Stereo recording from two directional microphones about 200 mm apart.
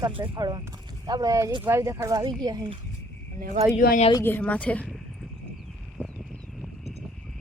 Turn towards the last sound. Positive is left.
turn(degrees=0)  # may be behind; listen again after turning